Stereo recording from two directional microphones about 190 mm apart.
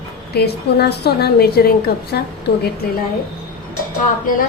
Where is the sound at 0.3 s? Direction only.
60° left (ahead or behind).